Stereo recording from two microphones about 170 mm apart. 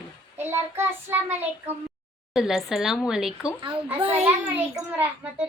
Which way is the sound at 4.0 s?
35° right (ahead or behind).